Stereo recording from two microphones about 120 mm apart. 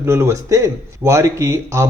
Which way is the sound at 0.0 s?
20° right (ahead or behind).